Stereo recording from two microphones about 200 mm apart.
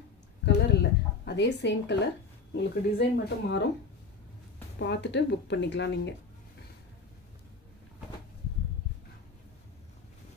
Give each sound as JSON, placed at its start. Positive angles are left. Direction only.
{"t": 0.5, "sound": "a sound", "side_deg": 60}
{"t": 2.5, "sound": "speech", "side_deg": 60}
{"t": 4.7, "sound": "speech", "side_deg": 60}